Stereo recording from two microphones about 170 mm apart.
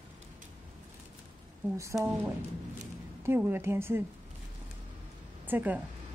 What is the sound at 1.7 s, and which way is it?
Speech, 15° right (ahead or behind).